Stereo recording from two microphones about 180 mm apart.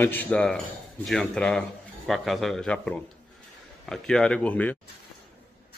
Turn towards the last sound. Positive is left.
turn(degrees=10)  # may be behind; listen again after turning